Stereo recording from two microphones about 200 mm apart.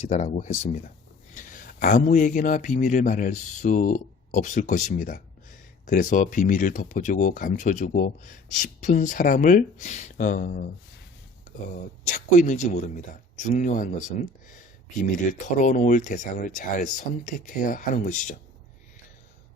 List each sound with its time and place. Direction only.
0.1 s speech: 35° left (ahead or behind)
11.7 s speech: 40° left (ahead or behind)
15.3 s speech: 40° left (ahead or behind)